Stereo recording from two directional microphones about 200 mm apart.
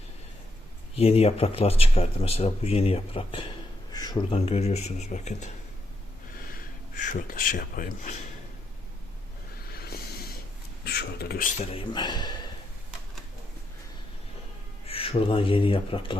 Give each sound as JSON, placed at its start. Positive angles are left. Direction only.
{"t": 0.9, "sound": "speech", "side_deg": 30}
{"t": 6.9, "sound": "speech", "side_deg": 40}
{"t": 9.7, "sound": "a sound", "side_deg": 50}
{"t": 11.7, "sound": "speech", "side_deg": 25}
{"t": 14.8, "sound": "speech", "side_deg": 30}